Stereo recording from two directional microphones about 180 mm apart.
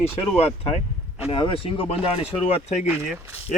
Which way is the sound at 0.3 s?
35° left (ahead or behind).